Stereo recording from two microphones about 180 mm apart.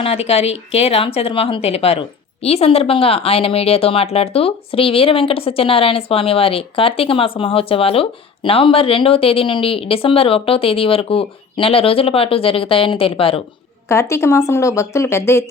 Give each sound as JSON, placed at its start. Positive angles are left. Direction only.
{"t": 0.0, "sound": "speech", "side_deg": 35}
{"t": 13.8, "sound": "speech", "side_deg": 15}